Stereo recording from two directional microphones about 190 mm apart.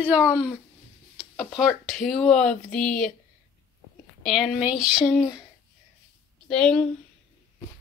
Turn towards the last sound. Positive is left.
turn(degrees=5)  # may be behind; listen again after turning